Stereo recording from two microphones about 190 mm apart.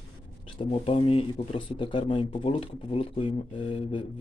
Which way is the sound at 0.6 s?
25° left (ahead or behind).